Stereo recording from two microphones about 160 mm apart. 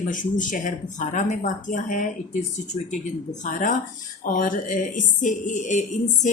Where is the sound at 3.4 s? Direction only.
55° left (ahead or behind).